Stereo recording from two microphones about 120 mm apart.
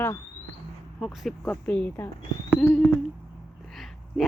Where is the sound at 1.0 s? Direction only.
Centre (ahead or behind).